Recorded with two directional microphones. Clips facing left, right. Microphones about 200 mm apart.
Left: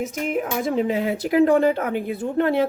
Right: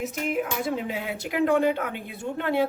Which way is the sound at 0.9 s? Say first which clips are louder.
Left 9 dB; 40° left (ahead or behind).